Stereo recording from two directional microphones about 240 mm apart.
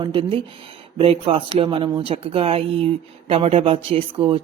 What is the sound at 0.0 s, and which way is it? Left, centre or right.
Speech, right.